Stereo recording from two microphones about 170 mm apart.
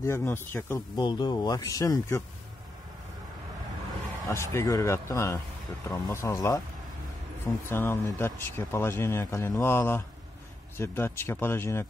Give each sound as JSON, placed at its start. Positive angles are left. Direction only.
{"t": 0.0, "sound": "speech", "side_deg": 15}
{"t": 0.9, "sound": "speech", "side_deg": 25}
{"t": 4.3, "sound": "speech", "side_deg": 15}
{"t": 7.7, "sound": "speech", "side_deg": 15}